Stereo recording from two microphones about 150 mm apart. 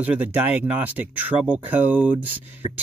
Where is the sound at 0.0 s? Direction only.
10° right (ahead or behind).